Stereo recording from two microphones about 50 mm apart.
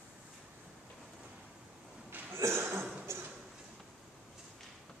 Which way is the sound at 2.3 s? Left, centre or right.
Right.